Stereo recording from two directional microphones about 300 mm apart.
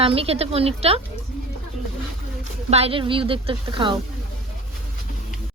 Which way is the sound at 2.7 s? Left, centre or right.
Centre.